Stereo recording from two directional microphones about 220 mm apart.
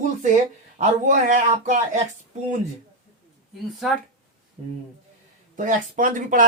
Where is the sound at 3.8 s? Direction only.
Centre (ahead or behind).